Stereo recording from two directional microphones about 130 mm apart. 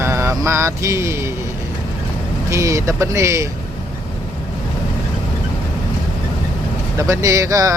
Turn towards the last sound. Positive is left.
turn(degrees=-25)  # may be behind; listen again after turning